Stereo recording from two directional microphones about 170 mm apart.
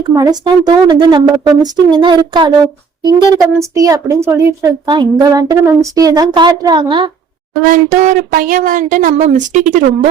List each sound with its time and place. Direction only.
0.2 s a woman's voice: 25° right (ahead or behind)
7.7 s speech: 50° right (ahead or behind)